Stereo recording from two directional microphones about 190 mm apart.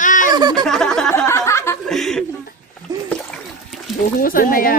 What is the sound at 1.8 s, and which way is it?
Chuckle, centre (ahead or behind).